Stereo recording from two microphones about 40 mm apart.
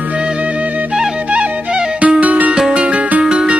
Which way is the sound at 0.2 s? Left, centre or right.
Right.